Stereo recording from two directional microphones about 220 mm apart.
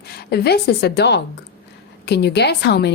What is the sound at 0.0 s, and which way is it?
A woman's voice, 45° left (ahead or behind).